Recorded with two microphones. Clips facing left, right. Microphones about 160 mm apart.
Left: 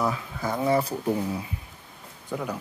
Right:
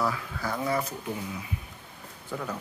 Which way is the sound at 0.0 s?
20° left (ahead or behind).